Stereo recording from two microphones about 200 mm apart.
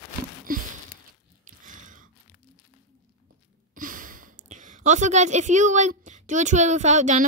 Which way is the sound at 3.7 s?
45° right (ahead or behind).